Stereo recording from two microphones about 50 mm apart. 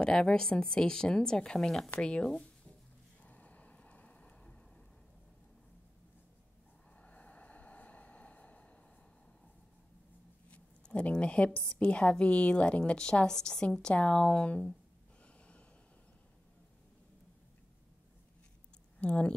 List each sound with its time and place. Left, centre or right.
0.0 s speech: centre
3.2 s a sound: left
7.0 s vehicle: left
10.5 s a sound: left
11.6 s a woman's voice: left
15.2 s snort: left
18.9 s speech: left